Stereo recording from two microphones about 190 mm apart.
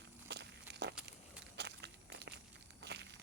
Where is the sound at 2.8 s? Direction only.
60° right (ahead or behind).